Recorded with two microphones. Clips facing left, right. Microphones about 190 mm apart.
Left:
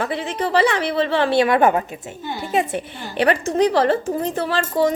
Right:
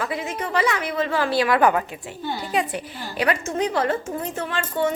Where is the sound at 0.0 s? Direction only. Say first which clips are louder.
Left 4 dB; 30° left (ahead or behind).